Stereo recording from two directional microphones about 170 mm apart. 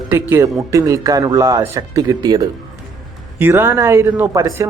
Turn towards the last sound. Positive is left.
turn(degrees=-20)  # may be behind; listen again after turning